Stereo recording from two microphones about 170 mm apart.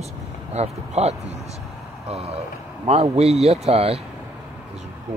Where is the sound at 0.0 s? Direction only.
40° right (ahead or behind).